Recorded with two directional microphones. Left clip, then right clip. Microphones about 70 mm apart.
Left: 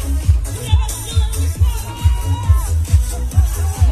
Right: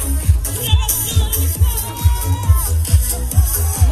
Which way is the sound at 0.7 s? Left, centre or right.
Right.